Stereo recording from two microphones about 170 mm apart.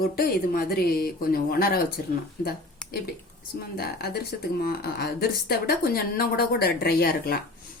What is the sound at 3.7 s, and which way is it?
Speech, 70° left (ahead or behind).